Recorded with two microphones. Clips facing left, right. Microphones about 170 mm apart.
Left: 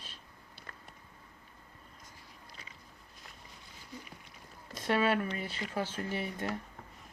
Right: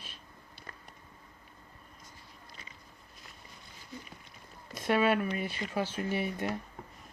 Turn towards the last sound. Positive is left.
turn(degrees=-15)  # may be behind; listen again after turning